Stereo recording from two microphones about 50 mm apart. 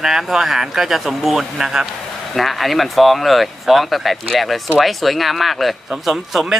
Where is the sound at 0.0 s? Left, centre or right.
Centre.